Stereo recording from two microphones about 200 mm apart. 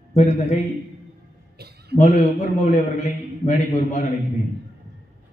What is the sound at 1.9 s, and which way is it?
A man's voice, 35° left (ahead or behind).